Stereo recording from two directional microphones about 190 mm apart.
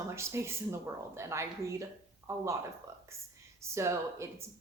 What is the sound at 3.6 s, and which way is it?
Speech, 15° right (ahead or behind).